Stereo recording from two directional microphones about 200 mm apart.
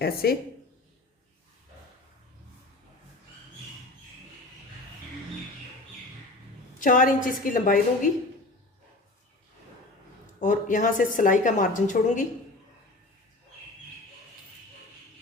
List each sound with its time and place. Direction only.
0.0 s speech: 50° left (ahead or behind)
6.7 s a woman's voice: 40° left (ahead or behind)
10.4 s a woman's voice: 40° left (ahead or behind)